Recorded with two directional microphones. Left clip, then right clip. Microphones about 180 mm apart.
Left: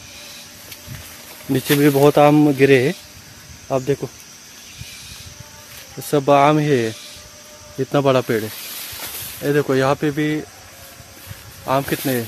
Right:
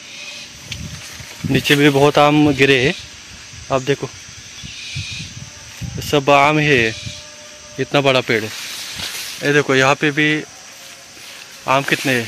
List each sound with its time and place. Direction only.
1.5 s speech: 5° left (ahead or behind)
6.0 s speech: centre (ahead or behind)
9.5 s speech: 5° right (ahead or behind)
11.6 s speech: 10° right (ahead or behind)